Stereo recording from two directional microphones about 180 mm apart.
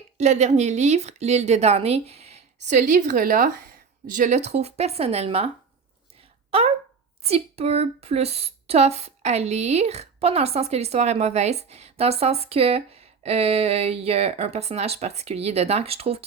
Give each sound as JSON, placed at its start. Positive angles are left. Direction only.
{"t": 0.2, "sound": "a woman's voice", "side_deg": -40}
{"t": 2.6, "sound": "a woman's voice", "side_deg": -45}
{"t": 6.5, "sound": "a woman's voice", "side_deg": -35}